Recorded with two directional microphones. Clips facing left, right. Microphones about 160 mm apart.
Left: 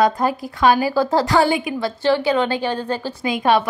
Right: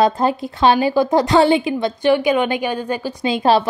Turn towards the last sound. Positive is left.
turn(degrees=-30)  # may be behind; listen again after turning